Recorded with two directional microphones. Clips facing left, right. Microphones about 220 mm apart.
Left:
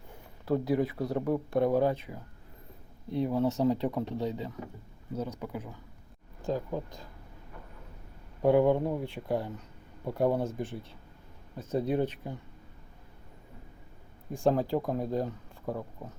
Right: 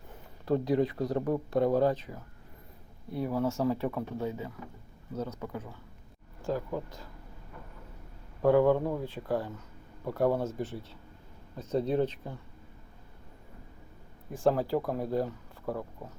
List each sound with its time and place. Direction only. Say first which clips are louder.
0.4 s speech: right 1 dB; 5° left (ahead or behind)
3.2 s speech: left 2 dB; 20° left (ahead or behind)
8.4 s speech: even; 15° left (ahead or behind)
14.3 s speech: even; 15° left (ahead or behind)